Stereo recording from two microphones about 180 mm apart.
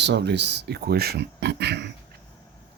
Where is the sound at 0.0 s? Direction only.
70° right (ahead or behind).